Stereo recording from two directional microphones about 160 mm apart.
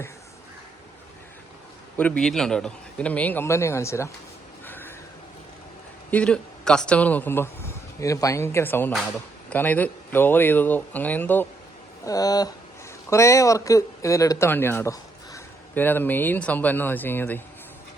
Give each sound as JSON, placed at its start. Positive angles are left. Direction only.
{"t": 2.0, "sound": "speech", "side_deg": 5}
{"t": 4.6, "sound": "a sound", "side_deg": 10}
{"t": 6.1, "sound": "a man's voice", "side_deg": 5}
{"t": 9.0, "sound": "speech", "side_deg": 0}
{"t": 9.6, "sound": "speech", "side_deg": 10}
{"t": 12.0, "sound": "speech", "side_deg": 20}